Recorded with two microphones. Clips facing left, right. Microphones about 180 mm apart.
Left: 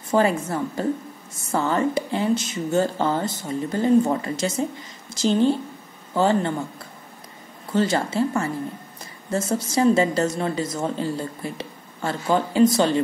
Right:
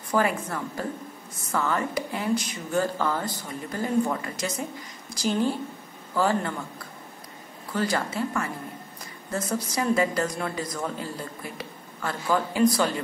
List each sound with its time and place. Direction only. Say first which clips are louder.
0.1 s a woman's voice: left 5 dB; 25° left (ahead or behind)
7.7 s a woman's voice: left 6 dB; 25° left (ahead or behind)